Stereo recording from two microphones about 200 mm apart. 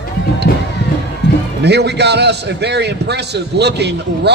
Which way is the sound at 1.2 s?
60° left (ahead or behind).